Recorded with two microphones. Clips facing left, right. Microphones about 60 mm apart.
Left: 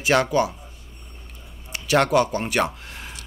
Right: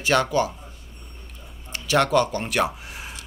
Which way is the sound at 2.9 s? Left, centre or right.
Centre.